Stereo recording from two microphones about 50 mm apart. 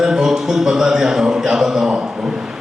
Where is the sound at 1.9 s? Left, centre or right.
Right.